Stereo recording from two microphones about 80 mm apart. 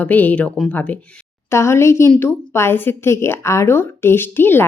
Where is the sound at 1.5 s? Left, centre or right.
Left.